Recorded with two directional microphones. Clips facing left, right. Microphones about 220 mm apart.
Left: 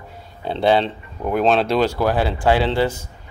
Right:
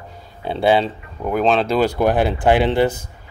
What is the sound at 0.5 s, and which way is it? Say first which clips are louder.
Speech: right 1 dB; 5° right (ahead or behind).